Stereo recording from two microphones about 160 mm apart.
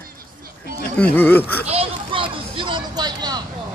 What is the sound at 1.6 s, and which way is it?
Vehicle, 35° right (ahead or behind).